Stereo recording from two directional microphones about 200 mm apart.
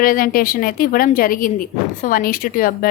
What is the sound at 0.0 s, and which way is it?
Speech, 45° left (ahead or behind).